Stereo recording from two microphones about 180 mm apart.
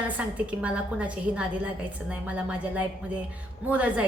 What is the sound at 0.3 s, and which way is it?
A woman's voice, 5° right (ahead or behind).